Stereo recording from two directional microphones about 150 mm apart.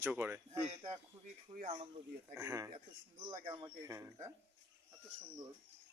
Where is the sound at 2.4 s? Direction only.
20° right (ahead or behind).